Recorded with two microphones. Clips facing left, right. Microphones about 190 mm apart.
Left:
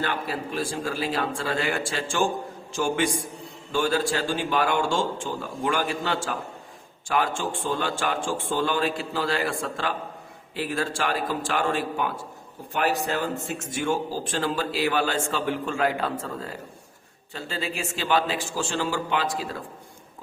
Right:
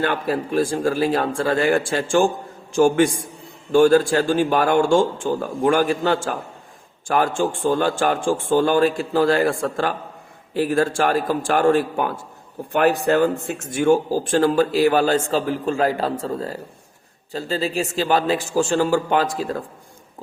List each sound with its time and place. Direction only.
0.0 s a man's voice: 50° right (ahead or behind)